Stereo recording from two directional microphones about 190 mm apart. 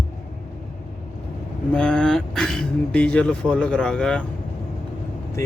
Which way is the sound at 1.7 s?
5° left (ahead or behind).